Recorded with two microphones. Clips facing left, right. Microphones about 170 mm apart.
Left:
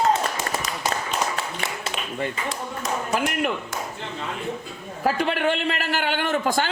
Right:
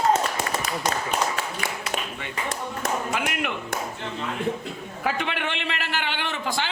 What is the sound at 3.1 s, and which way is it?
Speech, 40° left (ahead or behind).